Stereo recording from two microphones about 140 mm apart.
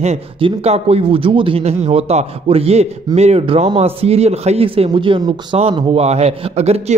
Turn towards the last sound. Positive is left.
turn(degrees=-50)  # may be behind; listen again after turning